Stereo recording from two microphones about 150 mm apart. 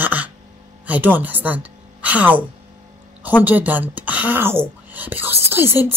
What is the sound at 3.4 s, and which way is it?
Speech, 10° right (ahead or behind).